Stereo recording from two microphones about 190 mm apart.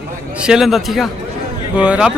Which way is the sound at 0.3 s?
5° right (ahead or behind).